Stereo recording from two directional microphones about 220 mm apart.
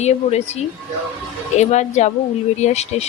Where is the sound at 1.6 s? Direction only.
30° left (ahead or behind).